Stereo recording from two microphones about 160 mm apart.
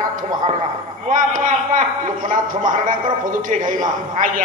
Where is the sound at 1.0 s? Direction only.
55° right (ahead or behind).